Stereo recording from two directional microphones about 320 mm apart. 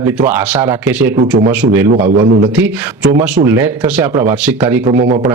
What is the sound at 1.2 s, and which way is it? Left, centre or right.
Speech, right.